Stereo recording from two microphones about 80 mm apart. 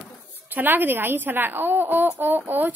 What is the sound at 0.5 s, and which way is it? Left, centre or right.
A woman's voice, right.